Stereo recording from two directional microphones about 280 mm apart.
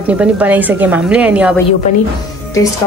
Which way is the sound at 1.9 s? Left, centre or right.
Left.